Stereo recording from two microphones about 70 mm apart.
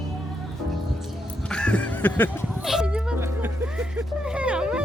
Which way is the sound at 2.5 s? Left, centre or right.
Centre.